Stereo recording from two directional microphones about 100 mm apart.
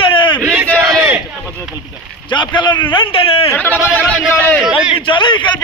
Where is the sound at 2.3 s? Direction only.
50° left (ahead or behind).